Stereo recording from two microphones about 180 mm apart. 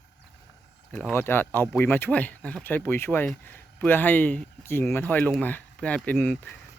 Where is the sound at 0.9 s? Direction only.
10° left (ahead or behind).